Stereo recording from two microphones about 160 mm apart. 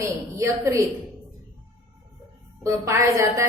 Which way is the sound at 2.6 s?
20° right (ahead or behind).